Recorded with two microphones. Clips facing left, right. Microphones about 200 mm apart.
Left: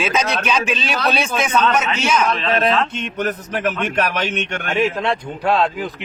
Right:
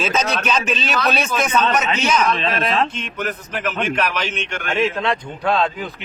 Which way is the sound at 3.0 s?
40° left (ahead or behind).